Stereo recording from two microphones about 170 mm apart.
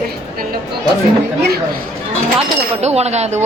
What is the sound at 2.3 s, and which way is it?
Speech, 40° right (ahead or behind).